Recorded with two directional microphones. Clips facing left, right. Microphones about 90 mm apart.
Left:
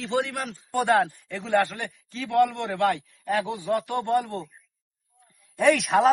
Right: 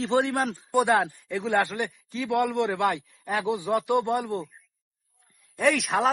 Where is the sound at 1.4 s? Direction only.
15° right (ahead or behind).